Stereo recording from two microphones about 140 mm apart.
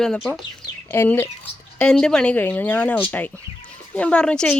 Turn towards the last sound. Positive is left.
turn(degrees=5)  # may be behind; listen again after turning